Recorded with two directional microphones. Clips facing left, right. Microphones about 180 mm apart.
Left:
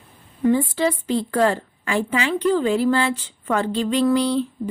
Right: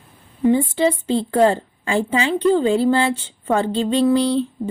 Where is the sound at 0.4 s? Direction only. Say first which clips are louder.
Right 2 dB; 25° right (ahead or behind).